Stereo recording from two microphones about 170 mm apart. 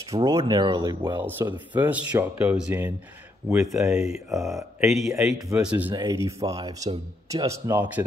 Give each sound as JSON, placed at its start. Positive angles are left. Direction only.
{"t": 0.1, "sound": "speech", "side_deg": -30}
{"t": 5.9, "sound": "speech", "side_deg": -20}